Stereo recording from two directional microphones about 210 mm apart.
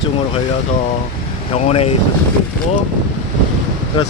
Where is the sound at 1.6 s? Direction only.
30° left (ahead or behind).